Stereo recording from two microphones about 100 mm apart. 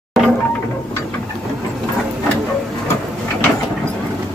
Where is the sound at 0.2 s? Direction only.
Centre (ahead or behind).